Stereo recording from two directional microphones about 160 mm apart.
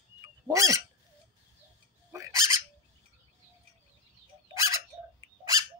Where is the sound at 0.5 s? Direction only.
20° right (ahead or behind).